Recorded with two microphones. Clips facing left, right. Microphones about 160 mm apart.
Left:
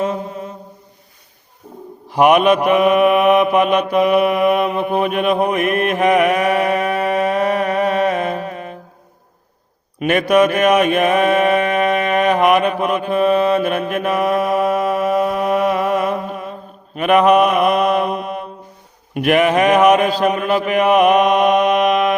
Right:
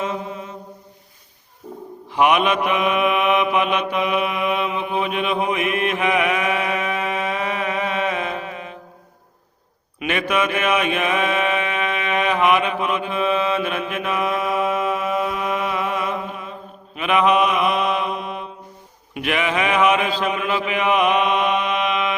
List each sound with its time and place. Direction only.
0.0 s mantra: 40° left (ahead or behind)
2.0 s mantra: 45° left (ahead or behind)
10.0 s mantra: 45° left (ahead or behind)